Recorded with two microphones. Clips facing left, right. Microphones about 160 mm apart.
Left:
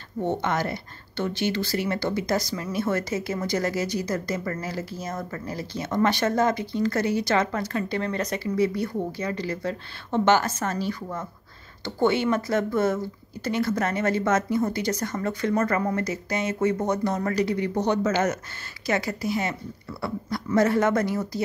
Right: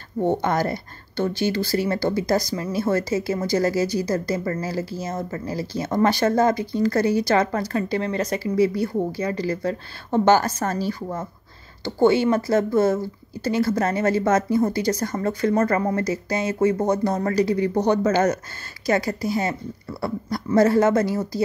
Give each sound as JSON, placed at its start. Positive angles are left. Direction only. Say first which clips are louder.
{"t": 0.2, "sound": "speech", "louder": "right 4 dB", "side_deg": -40}